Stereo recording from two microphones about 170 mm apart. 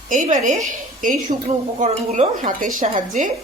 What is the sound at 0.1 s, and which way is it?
A woman's voice, 50° right (ahead or behind).